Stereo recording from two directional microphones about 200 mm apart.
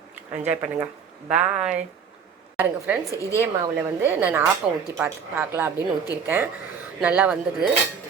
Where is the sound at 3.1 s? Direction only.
15° left (ahead or behind).